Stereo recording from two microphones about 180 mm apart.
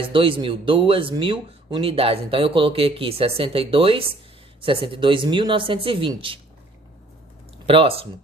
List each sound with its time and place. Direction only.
0.1 s speech: 30° right (ahead or behind)
7.7 s speech: 30° right (ahead or behind)